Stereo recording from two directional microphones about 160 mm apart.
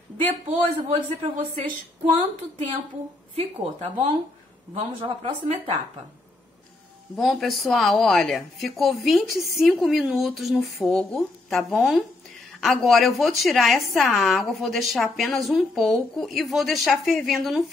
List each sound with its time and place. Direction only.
0.5 s speech: 40° right (ahead or behind)
3.3 s speech: 45° right (ahead or behind)
7.2 s a woman's voice: centre (ahead or behind)